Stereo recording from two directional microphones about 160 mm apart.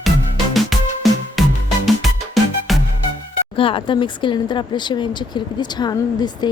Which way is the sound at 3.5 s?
35° left (ahead or behind).